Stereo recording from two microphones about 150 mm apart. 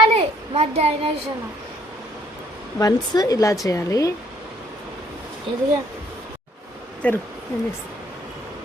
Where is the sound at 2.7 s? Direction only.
25° left (ahead or behind).